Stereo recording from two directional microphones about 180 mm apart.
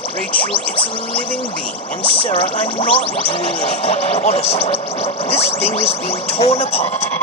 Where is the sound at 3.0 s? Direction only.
30° left (ahead or behind).